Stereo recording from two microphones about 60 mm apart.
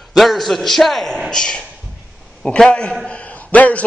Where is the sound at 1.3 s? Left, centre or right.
Centre.